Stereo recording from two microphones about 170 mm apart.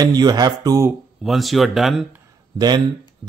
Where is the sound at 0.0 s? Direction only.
25° right (ahead or behind).